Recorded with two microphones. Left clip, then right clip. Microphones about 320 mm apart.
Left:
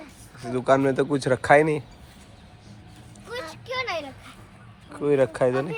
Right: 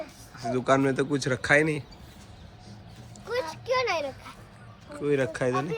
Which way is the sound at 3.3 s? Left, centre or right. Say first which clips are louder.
Right 5 dB; centre.